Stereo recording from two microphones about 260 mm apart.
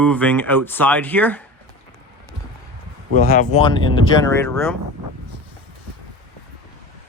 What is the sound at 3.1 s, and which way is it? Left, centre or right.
Speech, left.